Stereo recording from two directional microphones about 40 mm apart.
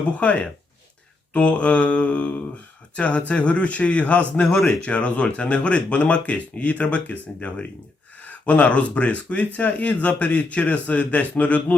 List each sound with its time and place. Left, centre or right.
0.2 s speech: left
4.4 s speech: centre
4.8 s speech: left